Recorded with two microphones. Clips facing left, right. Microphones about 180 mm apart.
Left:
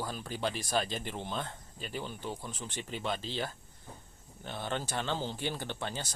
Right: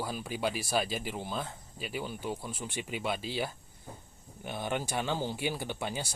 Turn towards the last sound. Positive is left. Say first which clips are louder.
# right 2 dB
turn(degrees=-10)  # may be behind; listen again after turning